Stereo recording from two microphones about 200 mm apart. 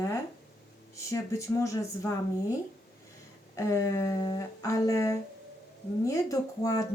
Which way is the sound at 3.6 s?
15° left (ahead or behind).